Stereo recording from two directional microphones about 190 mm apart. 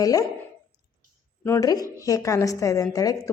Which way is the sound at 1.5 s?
20° left (ahead or behind).